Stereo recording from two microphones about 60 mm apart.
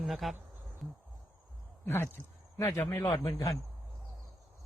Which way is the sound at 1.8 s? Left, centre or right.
Left.